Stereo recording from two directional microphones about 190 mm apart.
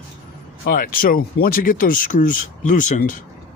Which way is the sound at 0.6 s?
45° left (ahead or behind).